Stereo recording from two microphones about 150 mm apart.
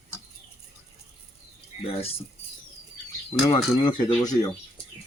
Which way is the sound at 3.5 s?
30° left (ahead or behind).